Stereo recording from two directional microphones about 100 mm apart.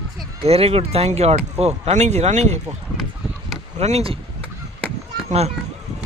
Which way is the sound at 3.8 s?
80° right.